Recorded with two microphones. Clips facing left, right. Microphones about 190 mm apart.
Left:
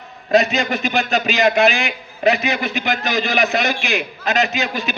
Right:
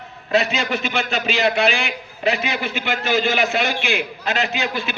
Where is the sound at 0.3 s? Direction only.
40° left (ahead or behind).